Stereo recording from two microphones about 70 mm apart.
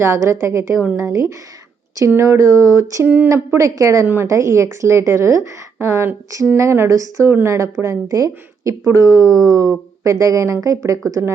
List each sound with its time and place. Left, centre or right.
0.0 s speech: right
4.0 s a woman's voice: right
4.3 s speech: right